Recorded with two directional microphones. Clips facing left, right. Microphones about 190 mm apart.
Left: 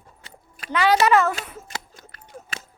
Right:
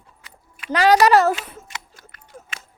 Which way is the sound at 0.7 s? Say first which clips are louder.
Right 3 dB; 40° right (ahead or behind).